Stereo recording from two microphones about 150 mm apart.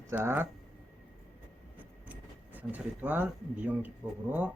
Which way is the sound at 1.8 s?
10° right (ahead or behind).